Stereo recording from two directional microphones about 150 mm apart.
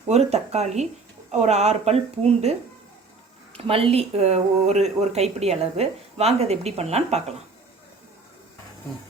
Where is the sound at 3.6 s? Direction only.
40° right (ahead or behind).